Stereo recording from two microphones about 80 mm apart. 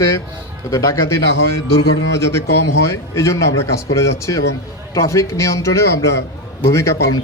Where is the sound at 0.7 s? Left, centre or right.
Left.